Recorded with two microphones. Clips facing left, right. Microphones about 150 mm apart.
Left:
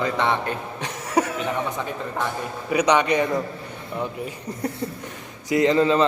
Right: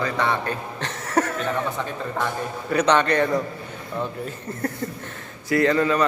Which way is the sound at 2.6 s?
10° left (ahead or behind).